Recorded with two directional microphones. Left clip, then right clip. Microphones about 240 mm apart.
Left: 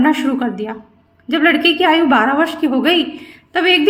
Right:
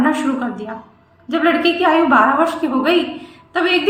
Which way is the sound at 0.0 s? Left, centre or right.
Left.